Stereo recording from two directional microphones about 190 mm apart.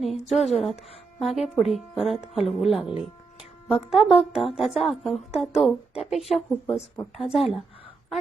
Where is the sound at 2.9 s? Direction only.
30° left (ahead or behind).